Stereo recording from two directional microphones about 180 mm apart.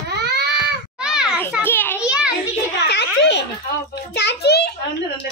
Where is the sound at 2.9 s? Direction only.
70° left (ahead or behind).